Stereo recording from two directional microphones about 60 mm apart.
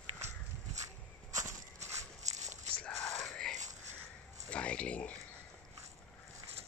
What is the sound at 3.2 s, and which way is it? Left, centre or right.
Whispering, centre.